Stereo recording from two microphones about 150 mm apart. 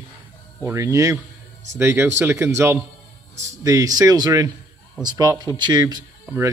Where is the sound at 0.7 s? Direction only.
20° right (ahead or behind).